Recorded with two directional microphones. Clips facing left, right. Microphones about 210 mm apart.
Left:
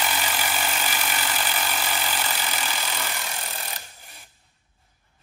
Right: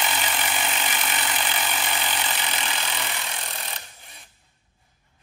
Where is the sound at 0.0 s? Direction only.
Centre (ahead or behind).